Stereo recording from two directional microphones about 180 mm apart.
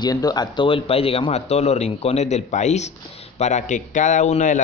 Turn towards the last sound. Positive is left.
turn(degrees=40)  # may be behind; listen again after turning